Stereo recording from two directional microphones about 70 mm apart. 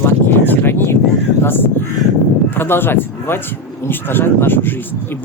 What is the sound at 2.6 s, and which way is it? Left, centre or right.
Speech, left.